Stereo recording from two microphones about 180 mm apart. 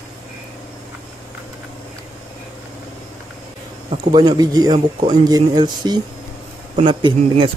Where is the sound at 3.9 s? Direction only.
25° right (ahead or behind).